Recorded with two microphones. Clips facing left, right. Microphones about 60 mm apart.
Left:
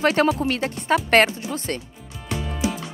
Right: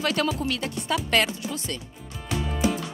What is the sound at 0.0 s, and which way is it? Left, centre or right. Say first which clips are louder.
Speech: left 6 dB; left.